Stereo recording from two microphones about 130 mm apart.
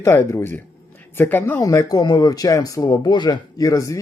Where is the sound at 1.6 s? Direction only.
25° left (ahead or behind).